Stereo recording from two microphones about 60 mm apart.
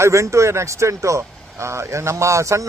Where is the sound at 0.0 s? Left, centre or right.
Right.